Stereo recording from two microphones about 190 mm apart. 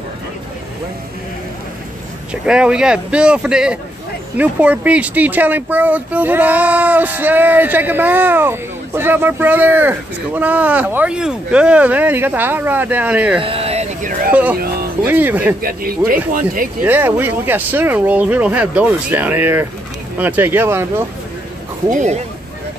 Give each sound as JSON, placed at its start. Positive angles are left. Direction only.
{"t": 2.4, "sound": "speech", "side_deg": -5}
{"t": 13.4, "sound": "a sound", "side_deg": -30}
{"t": 14.3, "sound": "speech", "side_deg": -10}
{"t": 15.6, "sound": "speech", "side_deg": -50}
{"t": 16.8, "sound": "speech", "side_deg": -10}
{"t": 21.9, "sound": "speech", "side_deg": -40}